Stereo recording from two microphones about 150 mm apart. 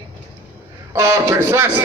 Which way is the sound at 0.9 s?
20° right (ahead or behind).